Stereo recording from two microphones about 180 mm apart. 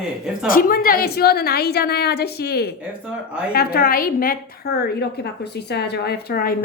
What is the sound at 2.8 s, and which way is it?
Speech, 5° right (ahead or behind).